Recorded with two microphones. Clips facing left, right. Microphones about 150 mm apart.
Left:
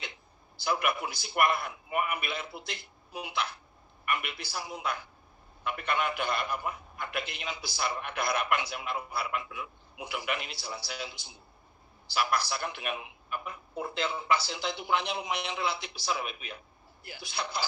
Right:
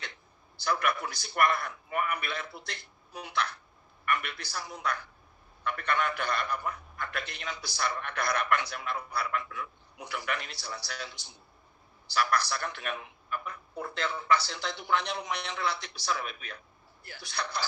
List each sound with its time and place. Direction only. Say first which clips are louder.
0.7 s a man's voice: even; 20° left (ahead or behind)